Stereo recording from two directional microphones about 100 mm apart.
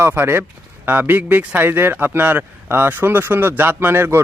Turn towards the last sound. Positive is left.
turn(degrees=-25)  # may be behind; listen again after turning